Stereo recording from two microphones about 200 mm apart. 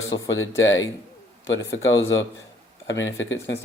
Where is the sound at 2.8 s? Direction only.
65° left (ahead or behind).